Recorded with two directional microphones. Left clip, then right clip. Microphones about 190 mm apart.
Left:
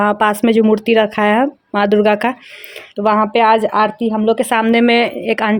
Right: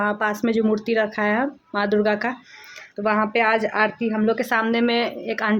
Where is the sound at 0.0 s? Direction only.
40° left (ahead or behind).